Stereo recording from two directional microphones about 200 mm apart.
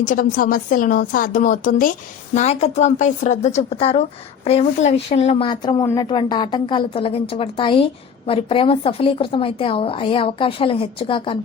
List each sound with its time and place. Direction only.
0.0 s a woman's voice: 40° left (ahead or behind)